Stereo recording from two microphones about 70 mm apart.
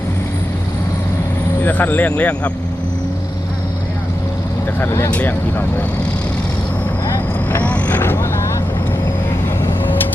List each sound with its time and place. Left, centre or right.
1.6 s speech: left
4.9 s speech: left
5.1 s speech: left
7.6 s vehicle: left